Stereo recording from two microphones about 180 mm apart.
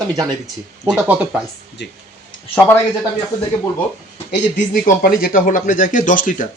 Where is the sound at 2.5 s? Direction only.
10° left (ahead or behind).